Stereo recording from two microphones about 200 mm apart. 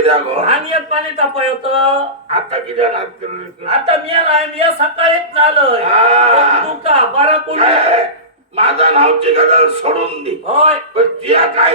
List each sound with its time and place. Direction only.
0.0 s a man's voice: 30° right (ahead or behind)